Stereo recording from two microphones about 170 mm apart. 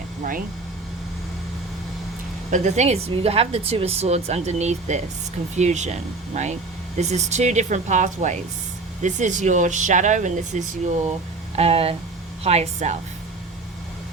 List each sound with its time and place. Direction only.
2.5 s a woman's voice: 45° right (ahead or behind)